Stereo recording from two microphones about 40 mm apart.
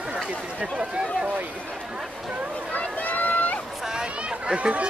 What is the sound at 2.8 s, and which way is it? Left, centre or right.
Run, left.